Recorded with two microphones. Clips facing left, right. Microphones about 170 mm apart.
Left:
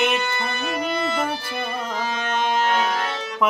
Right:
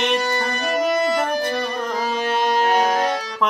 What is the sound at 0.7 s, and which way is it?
Music, 40° right (ahead or behind).